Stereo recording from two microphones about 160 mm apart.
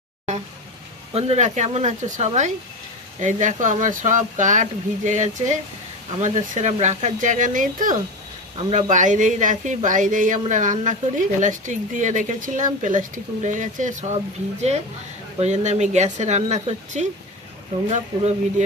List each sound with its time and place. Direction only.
1.1 s speech: 40° right (ahead or behind)